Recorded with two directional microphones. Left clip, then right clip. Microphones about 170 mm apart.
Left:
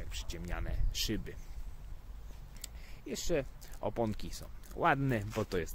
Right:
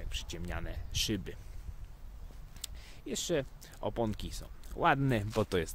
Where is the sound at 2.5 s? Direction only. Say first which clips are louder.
Right 4 dB; 25° right (ahead or behind).